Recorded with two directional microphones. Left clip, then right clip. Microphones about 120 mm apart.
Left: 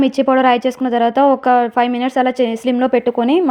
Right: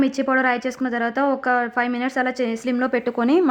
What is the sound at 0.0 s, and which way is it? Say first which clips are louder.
A woman's voice: left 7 dB; 35° left (ahead or behind).